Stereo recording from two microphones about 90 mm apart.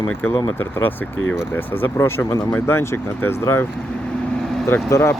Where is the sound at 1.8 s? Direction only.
25° left (ahead or behind).